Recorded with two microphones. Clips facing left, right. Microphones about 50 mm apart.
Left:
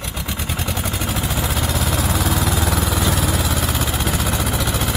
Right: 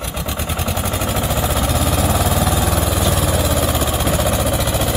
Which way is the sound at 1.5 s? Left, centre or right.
Centre.